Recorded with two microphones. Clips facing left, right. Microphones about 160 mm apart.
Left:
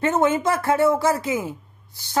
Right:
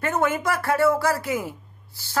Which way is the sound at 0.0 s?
20° left (ahead or behind).